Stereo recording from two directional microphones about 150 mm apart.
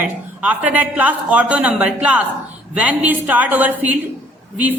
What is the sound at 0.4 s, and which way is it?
Speech, 10° right (ahead or behind).